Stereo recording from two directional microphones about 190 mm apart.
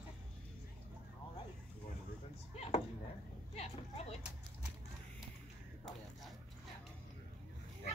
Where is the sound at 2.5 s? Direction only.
35° left (ahead or behind).